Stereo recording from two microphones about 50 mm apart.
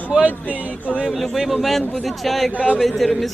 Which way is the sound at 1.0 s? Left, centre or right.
Centre.